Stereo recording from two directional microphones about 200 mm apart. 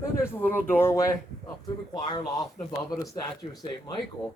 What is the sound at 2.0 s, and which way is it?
Speech, 20° left (ahead or behind).